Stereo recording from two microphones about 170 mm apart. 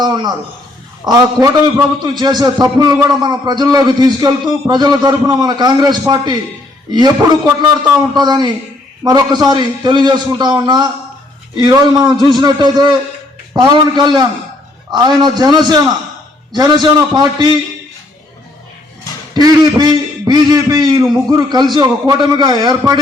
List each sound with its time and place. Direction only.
1.0 s a man's voice: 25° right (ahead or behind)
19.8 s a man's voice: 25° right (ahead or behind)